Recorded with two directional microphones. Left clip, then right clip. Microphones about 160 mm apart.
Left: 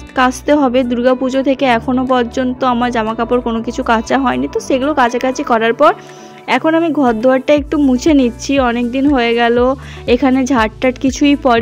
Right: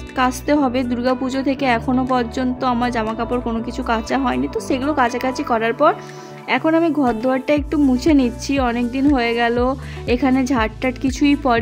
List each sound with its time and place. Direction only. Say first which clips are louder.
0.1 s speech: left 6 dB; 30° left (ahead or behind)